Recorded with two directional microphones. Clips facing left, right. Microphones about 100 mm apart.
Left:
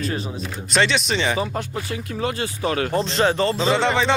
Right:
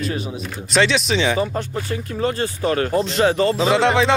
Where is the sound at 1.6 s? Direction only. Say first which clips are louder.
Right 3 dB; 40° right (ahead or behind).